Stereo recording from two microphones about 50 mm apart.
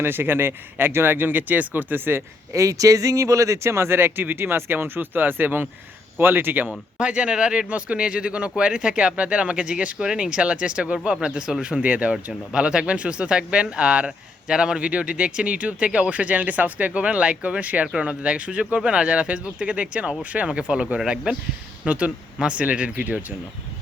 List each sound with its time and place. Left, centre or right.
0.0 s speech: right
2.5 s speech: right
7.0 s speech: right